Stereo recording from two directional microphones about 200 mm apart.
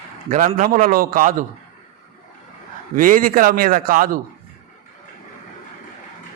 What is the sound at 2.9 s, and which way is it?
A man's voice, 45° right (ahead or behind).